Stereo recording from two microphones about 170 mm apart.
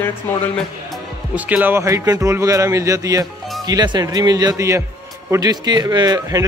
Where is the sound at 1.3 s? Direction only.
10° right (ahead or behind).